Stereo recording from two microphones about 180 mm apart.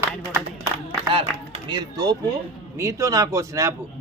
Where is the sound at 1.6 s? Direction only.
25° right (ahead or behind).